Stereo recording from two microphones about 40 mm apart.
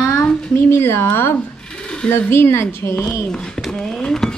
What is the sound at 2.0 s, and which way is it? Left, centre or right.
Speech, left.